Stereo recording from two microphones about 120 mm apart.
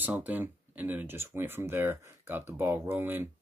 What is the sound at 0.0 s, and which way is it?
Speech, 15° right (ahead or behind).